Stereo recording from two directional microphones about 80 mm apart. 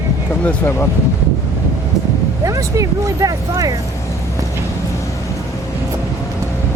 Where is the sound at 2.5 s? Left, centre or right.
Right.